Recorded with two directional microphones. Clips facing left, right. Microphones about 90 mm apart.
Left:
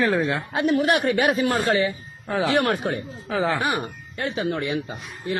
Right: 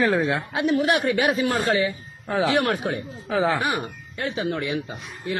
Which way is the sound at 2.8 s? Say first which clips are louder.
Left 1 dB; 45° left (ahead or behind).